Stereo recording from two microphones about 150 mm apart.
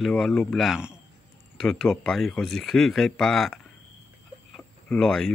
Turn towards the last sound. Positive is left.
turn(degrees=5)  # may be behind; listen again after turning